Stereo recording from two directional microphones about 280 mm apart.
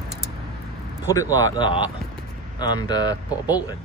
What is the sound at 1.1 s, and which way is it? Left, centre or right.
Speech, centre.